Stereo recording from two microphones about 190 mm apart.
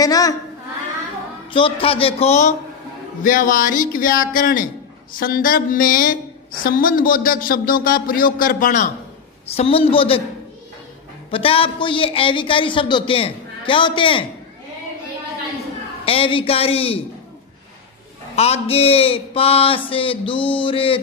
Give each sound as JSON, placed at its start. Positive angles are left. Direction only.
{"t": 0.0, "sound": "speech", "side_deg": 20}
{"t": 1.5, "sound": "speech", "side_deg": 30}
{"t": 3.2, "sound": "a man's voice", "side_deg": 45}
{"t": 9.5, "sound": "speech", "side_deg": 30}
{"t": 11.2, "sound": "speech", "side_deg": 30}
{"t": 16.1, "sound": "speech", "side_deg": 30}
{"t": 18.3, "sound": "speech", "side_deg": 35}